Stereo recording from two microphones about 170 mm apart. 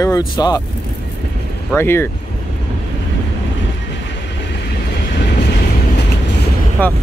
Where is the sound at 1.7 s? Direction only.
15° left (ahead or behind).